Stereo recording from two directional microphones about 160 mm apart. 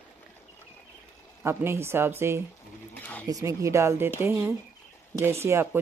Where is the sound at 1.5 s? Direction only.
15° right (ahead or behind).